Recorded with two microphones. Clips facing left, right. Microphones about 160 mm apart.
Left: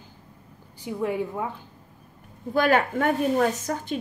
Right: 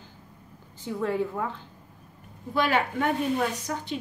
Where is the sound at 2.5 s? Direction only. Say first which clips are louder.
Left 4 dB; 45° left (ahead or behind).